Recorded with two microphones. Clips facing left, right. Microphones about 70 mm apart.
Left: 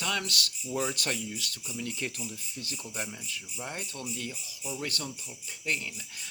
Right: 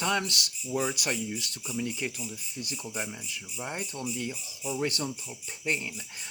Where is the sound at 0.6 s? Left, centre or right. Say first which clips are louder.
Right 2 dB; centre.